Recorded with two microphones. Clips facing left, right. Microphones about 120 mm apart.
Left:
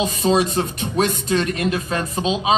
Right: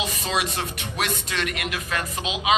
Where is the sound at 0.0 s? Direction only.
30° left (ahead or behind).